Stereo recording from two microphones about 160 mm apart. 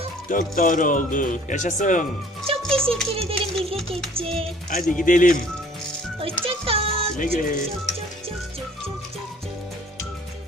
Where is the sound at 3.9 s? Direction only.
35° right (ahead or behind).